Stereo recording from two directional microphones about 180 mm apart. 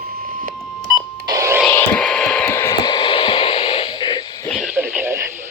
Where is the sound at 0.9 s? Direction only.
20° right (ahead or behind).